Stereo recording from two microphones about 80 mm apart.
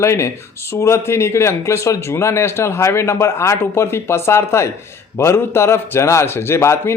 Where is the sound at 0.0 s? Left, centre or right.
Left.